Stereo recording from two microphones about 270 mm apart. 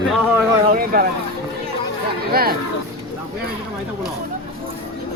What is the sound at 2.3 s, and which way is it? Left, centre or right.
Speech, right.